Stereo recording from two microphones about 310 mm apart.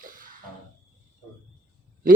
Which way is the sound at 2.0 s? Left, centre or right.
Right.